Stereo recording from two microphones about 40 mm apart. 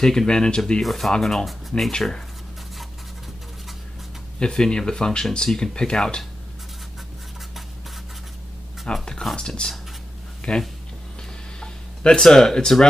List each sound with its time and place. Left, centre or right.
0.0 s speech: centre
0.8 s speech: centre
4.4 s speech: centre
8.9 s speech: left
12.0 s speech: centre